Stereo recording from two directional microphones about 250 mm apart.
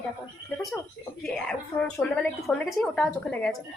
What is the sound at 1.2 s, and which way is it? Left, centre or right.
Speech, centre.